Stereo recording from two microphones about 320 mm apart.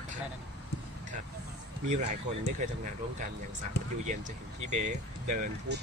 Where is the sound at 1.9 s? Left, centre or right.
Right.